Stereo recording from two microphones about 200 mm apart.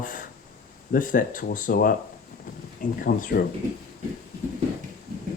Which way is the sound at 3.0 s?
50° left (ahead or behind).